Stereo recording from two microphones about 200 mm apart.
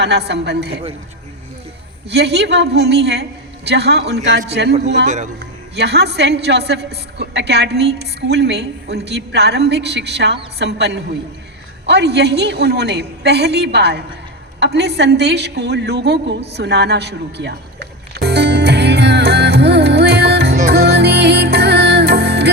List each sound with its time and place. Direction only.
0.0 s a woman's voice: 55° right (ahead or behind)
2.0 s a woman's voice: 55° right (ahead or behind)
5.0 s speech: 40° right (ahead or behind)
5.4 s a woman's voice: 55° right (ahead or behind)
14.6 s a sound: 55° right (ahead or behind)
20.7 s music: 55° right (ahead or behind)